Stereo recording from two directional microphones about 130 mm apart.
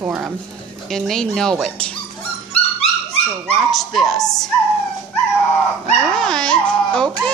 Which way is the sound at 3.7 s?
Centre (ahead or behind).